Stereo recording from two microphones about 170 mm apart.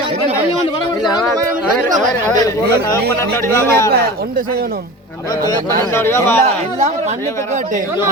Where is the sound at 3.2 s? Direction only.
15° left (ahead or behind).